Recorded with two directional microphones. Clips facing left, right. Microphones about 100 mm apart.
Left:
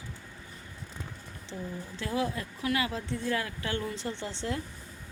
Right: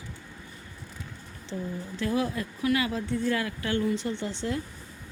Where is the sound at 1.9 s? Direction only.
25° left (ahead or behind).